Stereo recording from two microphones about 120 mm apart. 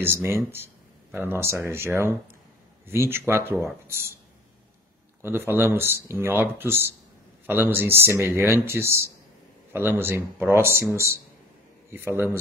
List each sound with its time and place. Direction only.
0.0 s speech: 20° right (ahead or behind)
5.2 s a man's voice: 20° right (ahead or behind)